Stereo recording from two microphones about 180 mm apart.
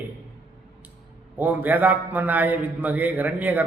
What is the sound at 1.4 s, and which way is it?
A man's voice, 10° right (ahead or behind).